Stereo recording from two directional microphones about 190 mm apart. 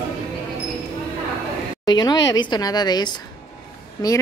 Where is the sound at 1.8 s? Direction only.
20° left (ahead or behind).